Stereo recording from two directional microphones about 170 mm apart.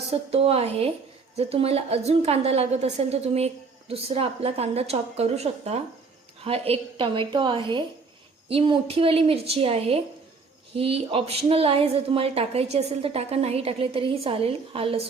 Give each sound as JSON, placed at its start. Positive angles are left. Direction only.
{"t": 0.1, "sound": "a woman's voice", "side_deg": -35}